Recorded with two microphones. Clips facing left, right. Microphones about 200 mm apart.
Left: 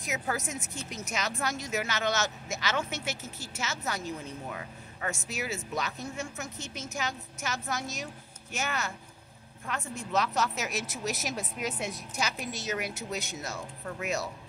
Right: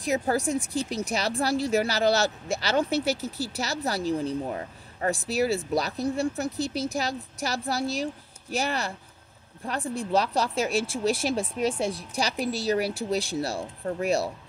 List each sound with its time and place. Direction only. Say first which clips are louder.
0.0 s speech: right 8 dB; 35° right (ahead or behind)